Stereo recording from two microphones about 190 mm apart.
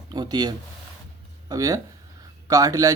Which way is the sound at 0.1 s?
20° right (ahead or behind).